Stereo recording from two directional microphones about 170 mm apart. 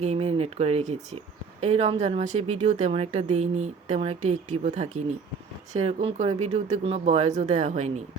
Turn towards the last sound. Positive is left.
turn(degrees=-45)  # may be behind; listen again after turning